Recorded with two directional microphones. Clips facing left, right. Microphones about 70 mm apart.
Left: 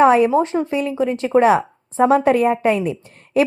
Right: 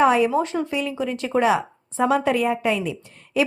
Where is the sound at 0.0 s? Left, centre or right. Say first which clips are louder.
Left 5 dB; left.